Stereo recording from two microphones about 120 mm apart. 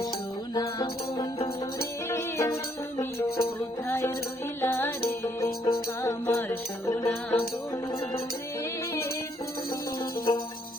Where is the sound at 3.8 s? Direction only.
20° left (ahead or behind).